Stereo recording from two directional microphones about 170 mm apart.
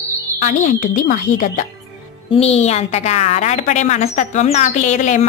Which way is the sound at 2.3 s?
35° left (ahead or behind).